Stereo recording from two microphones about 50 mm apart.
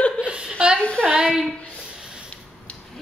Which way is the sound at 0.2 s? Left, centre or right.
Right.